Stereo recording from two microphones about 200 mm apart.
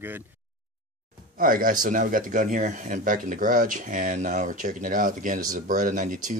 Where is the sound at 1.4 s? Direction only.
45° right (ahead or behind).